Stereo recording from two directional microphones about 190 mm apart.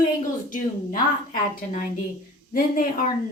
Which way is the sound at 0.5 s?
45° left (ahead or behind).